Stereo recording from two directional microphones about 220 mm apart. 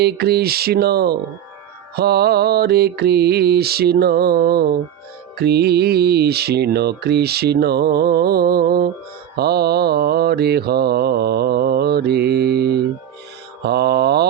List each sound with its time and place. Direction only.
0.0 s mantra: 45° right (ahead or behind)